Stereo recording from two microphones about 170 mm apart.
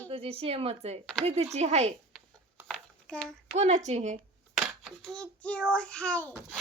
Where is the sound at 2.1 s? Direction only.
Centre (ahead or behind).